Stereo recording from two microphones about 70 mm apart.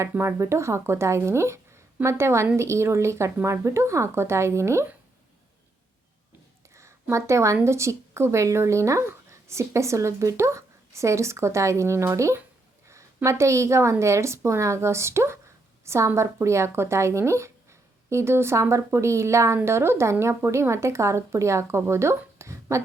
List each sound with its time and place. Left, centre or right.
0.1 s a woman's voice: right
6.7 s a woman's voice: right